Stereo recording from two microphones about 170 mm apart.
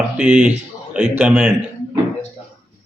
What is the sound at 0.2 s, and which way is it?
Speech, 5° right (ahead or behind).